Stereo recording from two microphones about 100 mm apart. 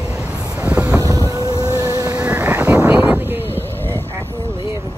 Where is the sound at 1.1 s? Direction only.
35° right (ahead or behind).